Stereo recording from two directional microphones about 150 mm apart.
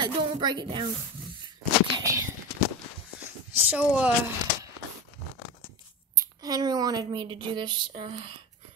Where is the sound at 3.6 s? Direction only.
10° right (ahead or behind).